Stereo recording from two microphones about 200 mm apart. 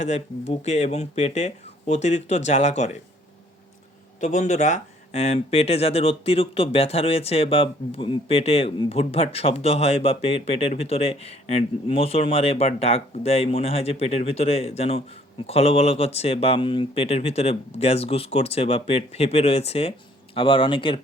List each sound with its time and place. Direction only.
0.0 s speech: 35° left (ahead or behind)
4.2 s speech: 40° left (ahead or behind)